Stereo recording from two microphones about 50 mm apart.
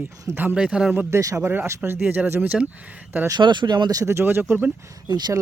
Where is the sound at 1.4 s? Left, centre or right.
Right.